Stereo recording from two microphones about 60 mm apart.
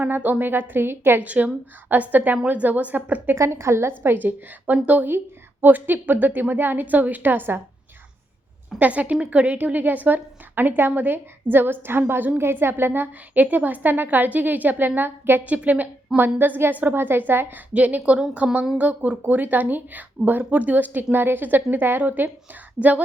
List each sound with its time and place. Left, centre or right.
0.0 s speech: right
1.2 s a woman's voice: right
3.3 s speech: right
8.8 s a woman's voice: right
15.4 s a woman's voice: right
17.7 s a woman's voice: right